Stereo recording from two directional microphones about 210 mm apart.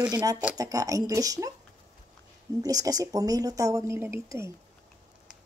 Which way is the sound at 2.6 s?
15° right (ahead or behind).